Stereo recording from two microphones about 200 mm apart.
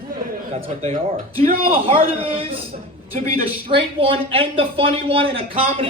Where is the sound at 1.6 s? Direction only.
30° right (ahead or behind).